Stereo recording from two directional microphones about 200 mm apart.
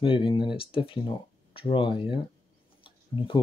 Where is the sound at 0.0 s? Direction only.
25° left (ahead or behind).